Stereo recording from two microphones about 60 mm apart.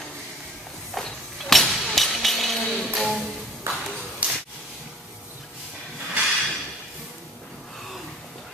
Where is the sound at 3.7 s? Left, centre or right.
Right.